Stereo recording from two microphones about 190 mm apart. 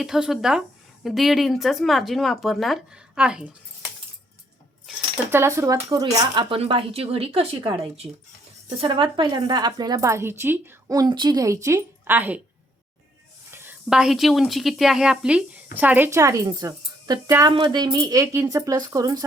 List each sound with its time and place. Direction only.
0.0 s speech: centre (ahead or behind)
5.3 s a woman's voice: 15° right (ahead or behind)
13.5 s a woman's voice: 10° right (ahead or behind)